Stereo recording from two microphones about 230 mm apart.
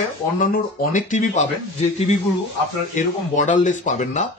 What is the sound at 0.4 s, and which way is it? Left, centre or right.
A man's voice, left.